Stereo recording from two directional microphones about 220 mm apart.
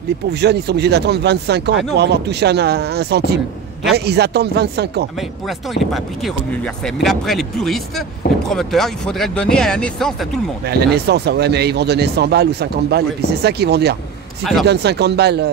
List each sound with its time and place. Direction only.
0.3 s speech: 50° right (ahead or behind)
6.2 s speech: centre (ahead or behind)
10.7 s speech: 50° right (ahead or behind)
14.4 s speech: centre (ahead or behind)
14.7 s speech: 50° right (ahead or behind)